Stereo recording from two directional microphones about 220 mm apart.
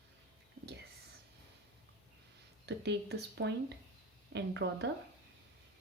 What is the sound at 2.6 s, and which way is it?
Speech, 50° right (ahead or behind).